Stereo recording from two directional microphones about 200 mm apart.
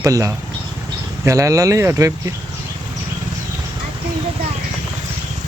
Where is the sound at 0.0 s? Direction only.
15° right (ahead or behind).